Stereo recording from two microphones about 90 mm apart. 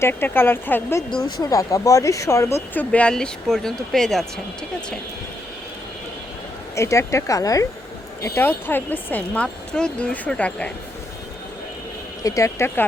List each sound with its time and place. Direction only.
0.0 s speech: 25° left (ahead or behind)
1.2 s speech: 40° left (ahead or behind)
2.7 s speech: 15° left (ahead or behind)
6.7 s speech: 35° left (ahead or behind)
8.2 s speech: 25° left (ahead or behind)
12.2 s speech: 35° left (ahead or behind)